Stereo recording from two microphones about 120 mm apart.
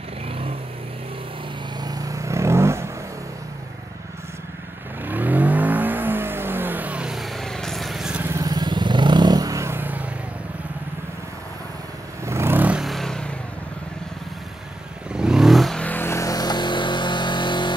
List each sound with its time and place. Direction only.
1.8 s vehicle: 30° right (ahead or behind)
5.0 s vehicle: 15° right (ahead or behind)
8.2 s vehicle: 25° right (ahead or behind)
12.3 s vehicle: 20° right (ahead or behind)
12.8 s vehicle: centre (ahead or behind)
15.1 s vehicle: 5° right (ahead or behind); by 17.7 s 40° left (ahead or behind)